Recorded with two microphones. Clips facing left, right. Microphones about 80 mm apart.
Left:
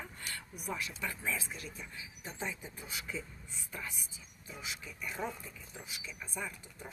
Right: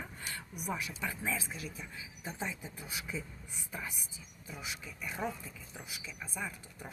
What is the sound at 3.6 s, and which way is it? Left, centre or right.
Speech, centre.